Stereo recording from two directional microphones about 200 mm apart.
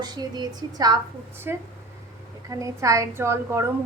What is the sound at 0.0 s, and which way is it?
A woman's voice, 20° right (ahead or behind).